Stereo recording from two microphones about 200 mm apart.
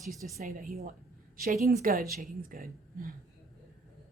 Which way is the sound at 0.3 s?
45° right (ahead or behind).